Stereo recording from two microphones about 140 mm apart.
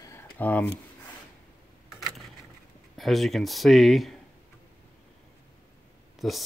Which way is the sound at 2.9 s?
Centre (ahead or behind).